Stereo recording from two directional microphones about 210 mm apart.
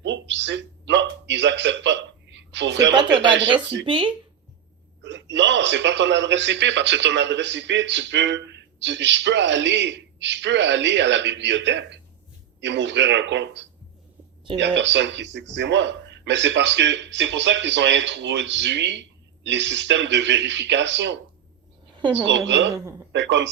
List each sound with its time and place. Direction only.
0.0 s a sound: 60° right (ahead or behind)
2.9 s speech: 20° right (ahead or behind)
5.0 s speech: 60° right (ahead or behind)
14.6 s speech: 60° right (ahead or behind)
22.0 s a woman's voice: 20° right (ahead or behind)
22.3 s speech: 60° right (ahead or behind)
22.7 s a man's voice: 15° right (ahead or behind)
23.1 s speech: 60° right (ahead or behind)